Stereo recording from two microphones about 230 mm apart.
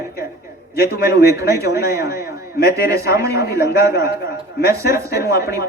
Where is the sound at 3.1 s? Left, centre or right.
Centre.